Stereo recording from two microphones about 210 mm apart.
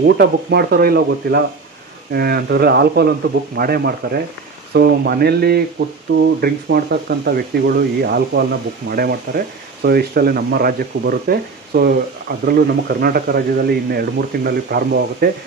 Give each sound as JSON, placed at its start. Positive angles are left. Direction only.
{"t": 0.0, "sound": "speech", "side_deg": -50}